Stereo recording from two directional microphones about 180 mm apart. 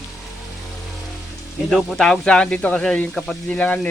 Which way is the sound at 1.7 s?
Centre (ahead or behind).